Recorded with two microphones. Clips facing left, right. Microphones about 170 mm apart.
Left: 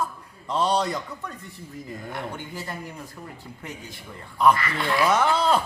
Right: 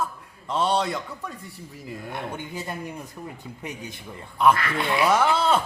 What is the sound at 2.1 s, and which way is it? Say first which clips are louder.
A man's voice: right 1 dB; 20° right (ahead or behind).